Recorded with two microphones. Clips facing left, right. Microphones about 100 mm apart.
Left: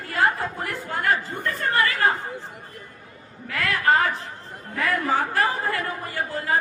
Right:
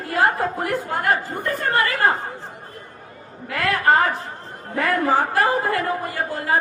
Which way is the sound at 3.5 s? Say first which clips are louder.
Right 3 dB; 45° right (ahead or behind).